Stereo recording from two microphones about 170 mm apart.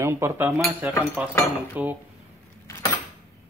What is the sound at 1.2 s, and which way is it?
Speech, 5° right (ahead or behind).